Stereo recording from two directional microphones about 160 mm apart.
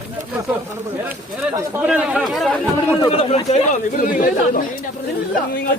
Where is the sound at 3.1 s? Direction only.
40° left (ahead or behind); by 4.6 s 55° left (ahead or behind).